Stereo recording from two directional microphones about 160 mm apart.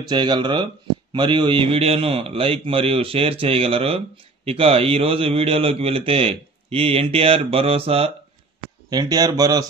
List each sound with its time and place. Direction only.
0.0 s a man's voice: 30° right (ahead or behind)
8.9 s speech: 25° right (ahead or behind)